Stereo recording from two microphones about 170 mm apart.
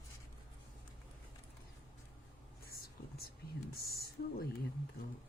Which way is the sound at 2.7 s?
65° left (ahead or behind).